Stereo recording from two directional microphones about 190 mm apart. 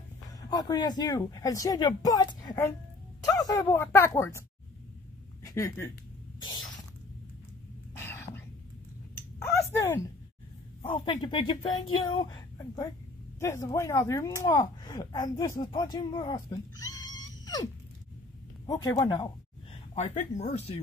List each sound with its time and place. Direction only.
0.5 s speech: 20° left (ahead or behind)
5.4 s speech: 15° left (ahead or behind)
7.9 s a sound: 10° left (ahead or behind)
10.8 s speech: 25° left (ahead or behind)
18.7 s speech: 20° left (ahead or behind)
19.7 s speech: 35° left (ahead or behind)